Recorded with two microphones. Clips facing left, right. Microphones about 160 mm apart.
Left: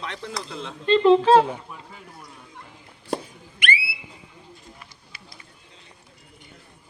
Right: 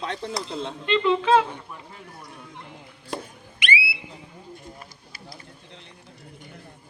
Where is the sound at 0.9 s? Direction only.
40° left (ahead or behind).